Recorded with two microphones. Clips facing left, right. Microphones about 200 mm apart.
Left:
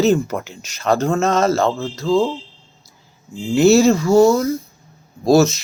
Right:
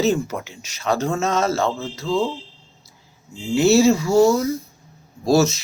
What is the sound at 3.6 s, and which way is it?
Speech, 5° right (ahead or behind).